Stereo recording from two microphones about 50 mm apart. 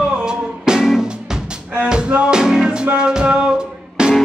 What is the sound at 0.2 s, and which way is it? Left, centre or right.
Music, centre.